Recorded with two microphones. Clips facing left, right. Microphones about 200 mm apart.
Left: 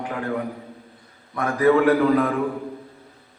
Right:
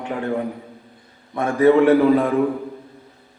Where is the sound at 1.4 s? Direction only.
25° right (ahead or behind).